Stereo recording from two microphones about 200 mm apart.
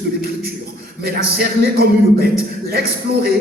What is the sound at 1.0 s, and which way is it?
A man's voice, 50° right (ahead or behind).